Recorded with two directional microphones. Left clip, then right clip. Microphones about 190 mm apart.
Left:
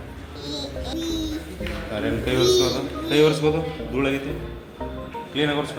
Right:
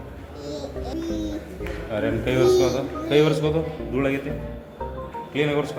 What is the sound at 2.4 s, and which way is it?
Speech, 5° left (ahead or behind).